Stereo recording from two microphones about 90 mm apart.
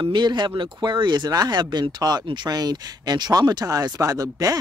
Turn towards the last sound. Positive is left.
turn(degrees=-45)  # may be behind; listen again after turning